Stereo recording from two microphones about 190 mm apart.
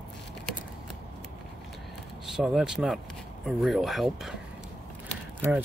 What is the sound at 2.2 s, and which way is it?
Speech, centre (ahead or behind).